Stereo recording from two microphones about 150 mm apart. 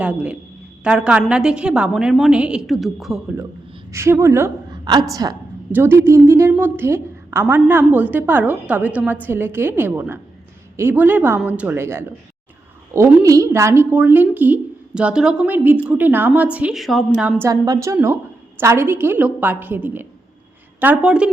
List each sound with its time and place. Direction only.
0.0 s a woman's voice: 10° right (ahead or behind)
3.9 s a woman's voice: 20° right (ahead or behind); by 17.0 s centre (ahead or behind)
17.4 s a woman's voice: 20° right (ahead or behind)